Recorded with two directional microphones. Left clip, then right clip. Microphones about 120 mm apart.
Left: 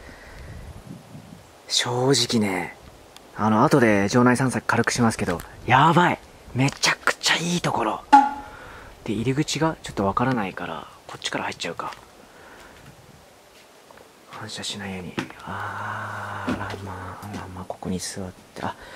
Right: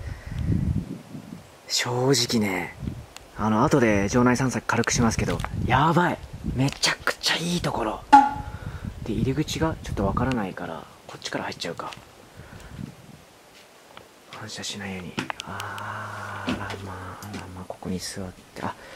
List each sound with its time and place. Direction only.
1.7 s speech: 10° left (ahead or behind)
9.0 s speech: 15° left (ahead or behind)
14.3 s speech: centre (ahead or behind)
15.4 s a sound: 20° left (ahead or behind)
17.6 s speech: 10° left (ahead or behind)